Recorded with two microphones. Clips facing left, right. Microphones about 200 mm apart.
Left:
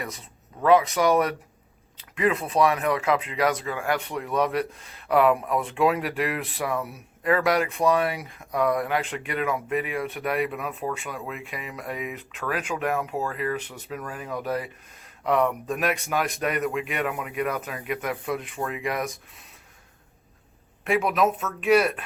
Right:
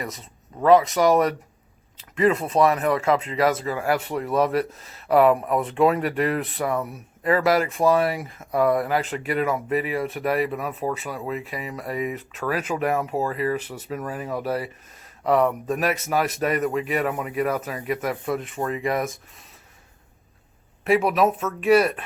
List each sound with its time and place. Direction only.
0.0 s speech: centre (ahead or behind)
11.4 s speech: 35° right (ahead or behind)
11.8 s speech: centre (ahead or behind)
20.8 s speech: centre (ahead or behind)